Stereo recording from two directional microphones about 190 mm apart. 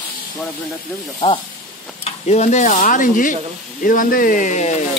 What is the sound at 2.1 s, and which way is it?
Stir, 35° left (ahead or behind).